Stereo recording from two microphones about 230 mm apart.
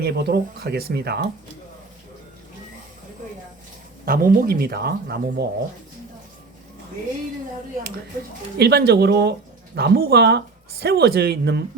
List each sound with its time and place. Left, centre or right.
0.0 s speech: right
4.0 s speech: right
8.5 s speech: right